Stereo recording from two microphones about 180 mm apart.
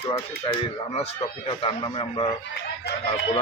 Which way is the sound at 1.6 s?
30° left (ahead or behind).